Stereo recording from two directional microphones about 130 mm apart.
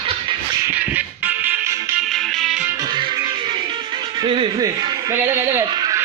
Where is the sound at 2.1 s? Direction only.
Centre (ahead or behind).